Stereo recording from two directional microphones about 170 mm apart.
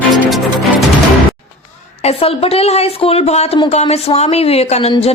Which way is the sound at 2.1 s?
35° left (ahead or behind).